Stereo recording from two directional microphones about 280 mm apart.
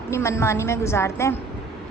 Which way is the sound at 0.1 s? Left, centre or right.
Centre.